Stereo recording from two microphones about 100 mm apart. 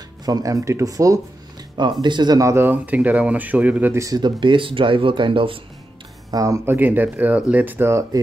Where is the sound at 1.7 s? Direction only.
50° right (ahead or behind).